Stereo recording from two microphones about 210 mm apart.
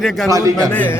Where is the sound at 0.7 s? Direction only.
5° left (ahead or behind).